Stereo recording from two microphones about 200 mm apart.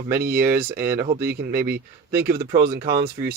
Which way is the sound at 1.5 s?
50° right (ahead or behind).